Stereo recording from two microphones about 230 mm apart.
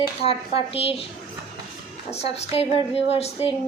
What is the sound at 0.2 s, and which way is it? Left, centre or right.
Speech, left.